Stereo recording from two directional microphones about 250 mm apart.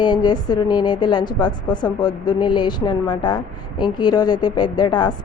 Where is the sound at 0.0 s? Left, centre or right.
Centre.